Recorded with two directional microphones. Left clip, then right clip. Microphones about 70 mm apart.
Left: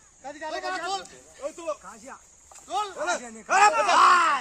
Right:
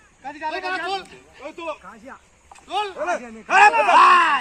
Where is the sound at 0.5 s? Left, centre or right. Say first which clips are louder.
Right 3 dB; left.